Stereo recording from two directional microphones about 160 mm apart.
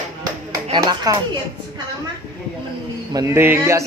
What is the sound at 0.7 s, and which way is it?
Speech, 25° right (ahead or behind).